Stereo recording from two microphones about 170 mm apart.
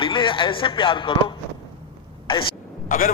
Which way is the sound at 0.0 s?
30° left (ahead or behind).